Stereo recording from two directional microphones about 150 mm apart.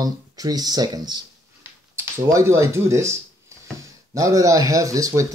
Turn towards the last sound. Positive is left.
turn(degrees=-20)  # may be behind; listen again after turning